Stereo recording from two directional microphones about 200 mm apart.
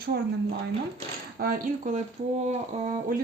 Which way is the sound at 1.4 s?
40° right (ahead or behind).